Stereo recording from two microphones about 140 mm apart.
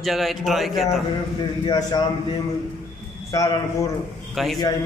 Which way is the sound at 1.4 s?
30° left (ahead or behind).